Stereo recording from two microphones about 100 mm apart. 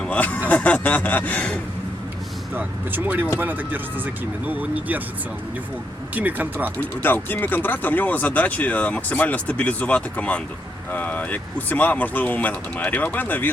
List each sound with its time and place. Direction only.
0.0 s speech: 15° left (ahead or behind)
2.6 s speech: 20° right (ahead or behind)
6.1 s speech: 15° right (ahead or behind)
6.7 s speech: 20° left (ahead or behind)